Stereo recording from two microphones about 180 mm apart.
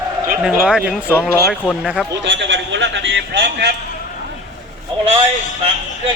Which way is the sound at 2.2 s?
85° right.